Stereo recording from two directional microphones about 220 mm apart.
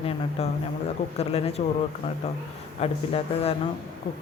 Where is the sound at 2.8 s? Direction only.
25° left (ahead or behind).